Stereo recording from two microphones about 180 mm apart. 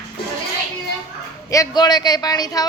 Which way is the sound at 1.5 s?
20° left (ahead or behind).